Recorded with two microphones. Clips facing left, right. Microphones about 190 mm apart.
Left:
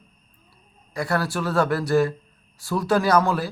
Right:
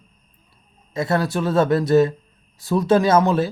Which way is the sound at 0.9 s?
20° right (ahead or behind).